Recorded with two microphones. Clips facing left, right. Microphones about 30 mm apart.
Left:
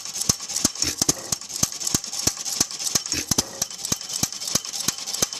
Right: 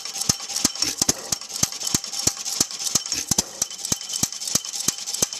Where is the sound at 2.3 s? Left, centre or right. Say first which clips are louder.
Even; centre.